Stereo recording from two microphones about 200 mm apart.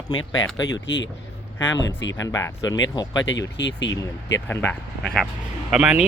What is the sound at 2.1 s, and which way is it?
Speech, 15° left (ahead or behind).